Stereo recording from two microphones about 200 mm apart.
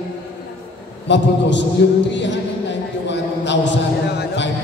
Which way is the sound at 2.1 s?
60° left (ahead or behind).